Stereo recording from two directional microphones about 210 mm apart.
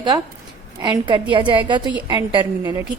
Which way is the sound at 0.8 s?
20° right (ahead or behind).